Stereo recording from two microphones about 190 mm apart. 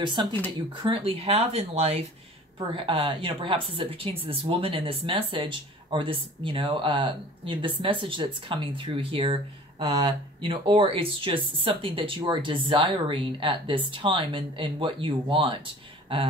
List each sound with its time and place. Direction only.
0.0 s speech: 25° right (ahead or behind)